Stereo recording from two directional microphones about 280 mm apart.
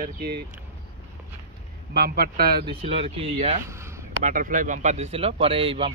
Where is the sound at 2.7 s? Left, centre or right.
Centre.